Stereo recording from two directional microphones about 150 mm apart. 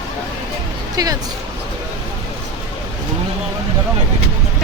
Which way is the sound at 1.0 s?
25° right (ahead or behind).